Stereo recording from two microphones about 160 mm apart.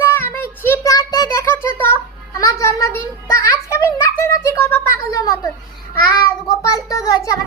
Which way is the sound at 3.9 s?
15° left (ahead or behind).